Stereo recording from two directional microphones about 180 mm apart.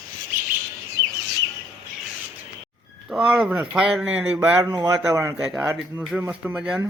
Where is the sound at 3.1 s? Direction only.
5° right (ahead or behind).